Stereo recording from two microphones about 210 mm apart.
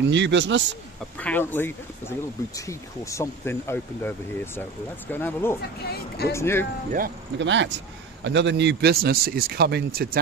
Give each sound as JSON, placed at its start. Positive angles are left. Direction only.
{"t": 0.1, "sound": "a man's voice", "side_deg": -60}
{"t": 1.2, "sound": "speech", "side_deg": 10}
{"t": 7.3, "sound": "a man's voice", "side_deg": -60}